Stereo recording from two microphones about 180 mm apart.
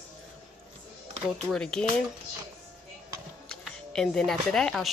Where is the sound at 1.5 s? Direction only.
5° left (ahead or behind).